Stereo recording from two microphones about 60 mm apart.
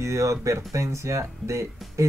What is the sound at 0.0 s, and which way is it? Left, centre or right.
Speech, right.